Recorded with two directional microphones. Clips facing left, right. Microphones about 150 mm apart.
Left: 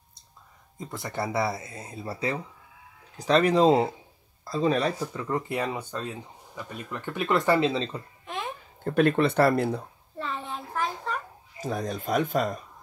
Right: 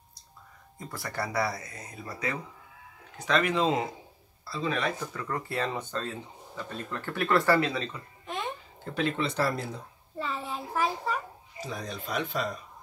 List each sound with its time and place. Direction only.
0.7 s speech: 20° left (ahead or behind); by 4.9 s 35° left (ahead or behind)
5.1 s speech: 20° left (ahead or behind)
8.3 s music: centre (ahead or behind)
8.8 s speech: 55° left (ahead or behind)
10.1 s a sound: centre (ahead or behind)
11.6 s speech: 45° left (ahead or behind)